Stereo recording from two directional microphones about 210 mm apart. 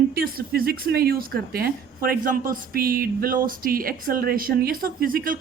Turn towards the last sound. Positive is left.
turn(degrees=-45)  # may be behind; listen again after turning